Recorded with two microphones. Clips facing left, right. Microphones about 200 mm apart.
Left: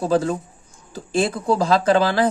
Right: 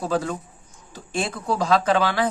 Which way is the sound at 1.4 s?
25° left (ahead or behind).